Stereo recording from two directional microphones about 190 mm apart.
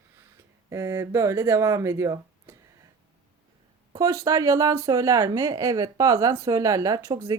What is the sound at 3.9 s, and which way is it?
Speech, 15° right (ahead or behind).